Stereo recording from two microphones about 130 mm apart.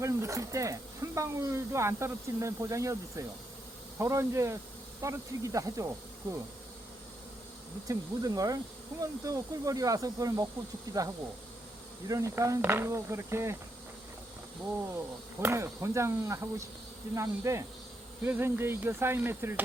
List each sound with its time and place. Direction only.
0.0 s speech: 25° right (ahead or behind)
7.9 s speech: 25° right (ahead or behind)
12.0 s speech: 25° right (ahead or behind)
15.4 s speech: 20° right (ahead or behind)
18.3 s a sound: 15° right (ahead or behind)